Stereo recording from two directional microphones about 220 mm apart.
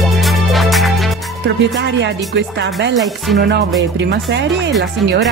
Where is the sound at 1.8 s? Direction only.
55° right (ahead or behind).